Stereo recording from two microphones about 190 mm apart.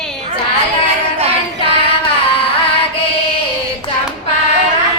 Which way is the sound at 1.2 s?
30° right (ahead or behind).